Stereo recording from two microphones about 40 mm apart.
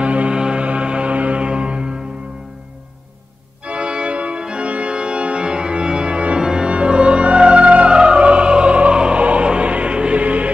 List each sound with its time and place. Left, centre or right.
0.0 s music: right
3.6 s organ: right
6.4 s music: right